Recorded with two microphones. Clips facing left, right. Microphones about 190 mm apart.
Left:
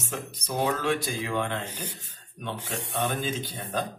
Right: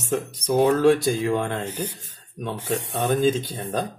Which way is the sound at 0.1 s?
40° right (ahead or behind).